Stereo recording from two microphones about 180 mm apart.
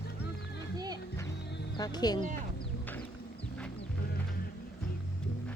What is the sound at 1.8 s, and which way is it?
Speech, 20° left (ahead or behind).